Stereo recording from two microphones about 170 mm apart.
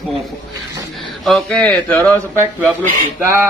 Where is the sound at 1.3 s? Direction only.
5° left (ahead or behind).